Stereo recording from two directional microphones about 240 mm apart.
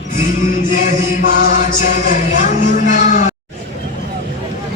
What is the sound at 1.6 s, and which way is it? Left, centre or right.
Speech, left.